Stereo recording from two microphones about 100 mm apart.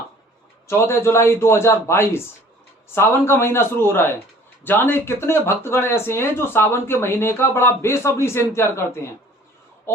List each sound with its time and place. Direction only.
0.7 s speech: 25° left (ahead or behind)